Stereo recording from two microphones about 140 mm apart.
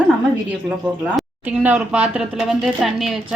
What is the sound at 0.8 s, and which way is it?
A woman's voice, centre (ahead or behind).